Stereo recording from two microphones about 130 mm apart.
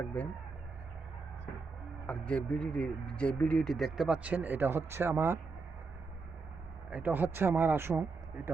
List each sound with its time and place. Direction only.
2.0 s speech: 10° left (ahead or behind); by 5.4 s 20° right (ahead or behind)
6.9 s speech: 15° right (ahead or behind)